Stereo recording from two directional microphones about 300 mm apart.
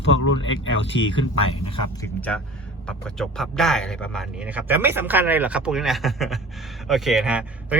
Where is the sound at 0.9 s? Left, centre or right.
Left.